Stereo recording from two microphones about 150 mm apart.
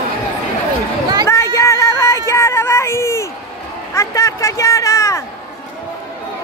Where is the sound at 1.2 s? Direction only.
20° left (ahead or behind).